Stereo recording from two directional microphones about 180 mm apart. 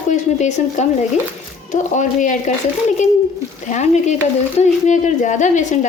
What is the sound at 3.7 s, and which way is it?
Speech, 40° left (ahead or behind).